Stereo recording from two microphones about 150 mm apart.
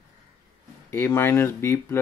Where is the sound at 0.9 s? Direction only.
15° left (ahead or behind).